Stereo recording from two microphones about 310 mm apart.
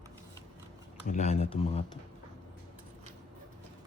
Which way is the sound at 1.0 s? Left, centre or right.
Left.